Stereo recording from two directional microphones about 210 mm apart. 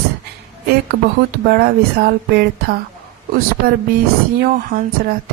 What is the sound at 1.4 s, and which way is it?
Speech, 45° right (ahead or behind).